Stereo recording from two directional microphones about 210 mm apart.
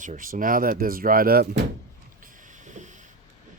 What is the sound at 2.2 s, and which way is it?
Vehicle, 35° right (ahead or behind).